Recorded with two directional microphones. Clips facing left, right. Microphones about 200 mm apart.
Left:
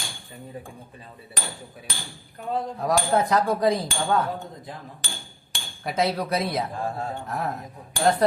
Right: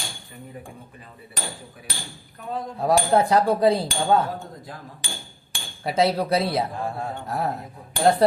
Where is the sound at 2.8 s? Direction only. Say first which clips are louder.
Right 4 dB; 30° right (ahead or behind).